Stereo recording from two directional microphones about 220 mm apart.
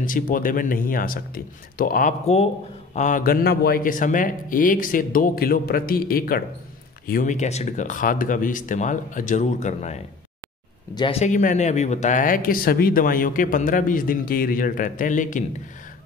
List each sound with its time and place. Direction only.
0.0 s speech: 40° left (ahead or behind)